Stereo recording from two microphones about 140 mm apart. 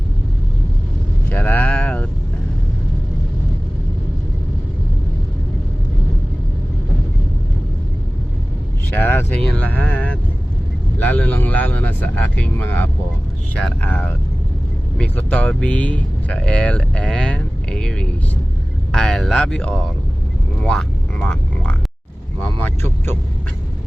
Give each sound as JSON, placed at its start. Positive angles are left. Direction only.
{"t": 1.3, "sound": "a sound", "side_deg": 15}
{"t": 9.0, "sound": "speech", "side_deg": 15}
{"t": 20.6, "sound": "vehicle", "side_deg": 5}
{"t": 22.4, "sound": "speech", "side_deg": 15}